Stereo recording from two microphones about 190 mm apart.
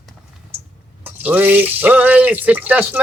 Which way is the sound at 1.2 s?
10° right (ahead or behind).